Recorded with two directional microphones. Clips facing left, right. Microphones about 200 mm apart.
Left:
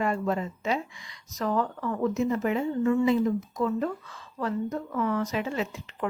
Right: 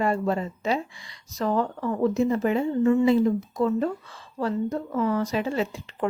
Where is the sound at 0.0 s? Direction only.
30° right (ahead or behind).